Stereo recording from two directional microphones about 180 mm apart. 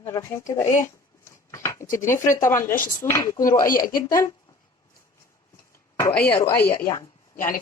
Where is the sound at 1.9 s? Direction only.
15° left (ahead or behind).